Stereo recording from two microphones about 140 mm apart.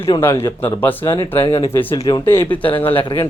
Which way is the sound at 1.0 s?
30° left (ahead or behind).